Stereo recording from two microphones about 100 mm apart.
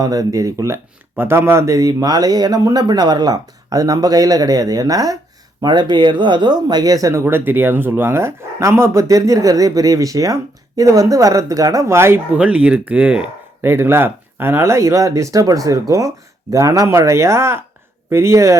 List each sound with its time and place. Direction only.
0.0 s speech: 35° right (ahead or behind)
5.6 s speech: 50° right (ahead or behind); by 12.2 s 25° right (ahead or behind)
12.3 s speech: 10° right (ahead or behind)
13.6 s speech: 25° right (ahead or behind)